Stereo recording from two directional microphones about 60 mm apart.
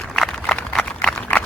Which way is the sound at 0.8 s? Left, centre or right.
Centre.